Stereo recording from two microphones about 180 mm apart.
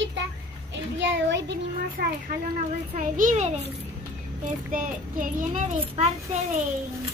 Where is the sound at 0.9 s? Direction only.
80° right; by 2.3 s 60° right (ahead or behind).